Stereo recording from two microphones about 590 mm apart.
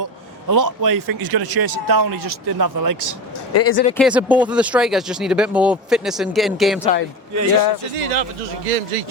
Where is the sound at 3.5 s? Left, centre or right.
Left.